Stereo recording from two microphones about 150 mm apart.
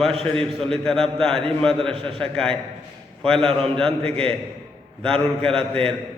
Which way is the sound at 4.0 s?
40° right (ahead or behind).